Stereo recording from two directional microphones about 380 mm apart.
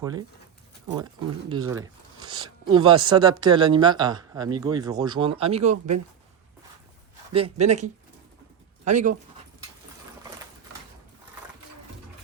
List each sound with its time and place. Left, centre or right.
0.0 s speech: centre
7.3 s speech: centre